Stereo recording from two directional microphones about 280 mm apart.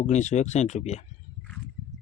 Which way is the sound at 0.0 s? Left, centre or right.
Left.